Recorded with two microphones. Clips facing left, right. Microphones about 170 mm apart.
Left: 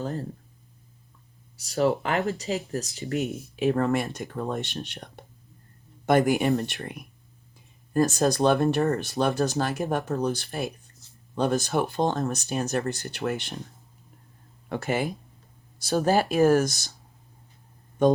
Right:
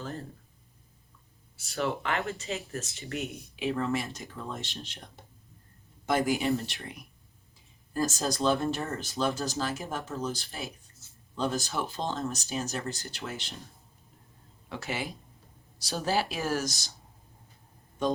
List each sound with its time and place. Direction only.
0.0 s speech: 35° left (ahead or behind)
1.5 s speech: 40° left (ahead or behind); by 13.6 s 60° left (ahead or behind)
14.7 s speech: 50° left (ahead or behind)
18.0 s speech: 55° left (ahead or behind)